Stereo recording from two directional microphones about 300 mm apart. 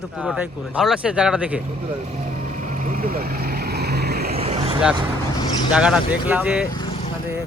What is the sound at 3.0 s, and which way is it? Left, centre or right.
Speech, right.